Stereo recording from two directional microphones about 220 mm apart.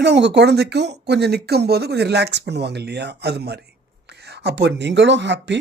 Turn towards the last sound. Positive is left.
turn(degrees=-55)  # may be behind; listen again after turning